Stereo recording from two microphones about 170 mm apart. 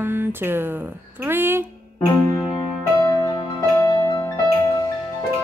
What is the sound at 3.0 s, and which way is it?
Music, 20° left (ahead or behind).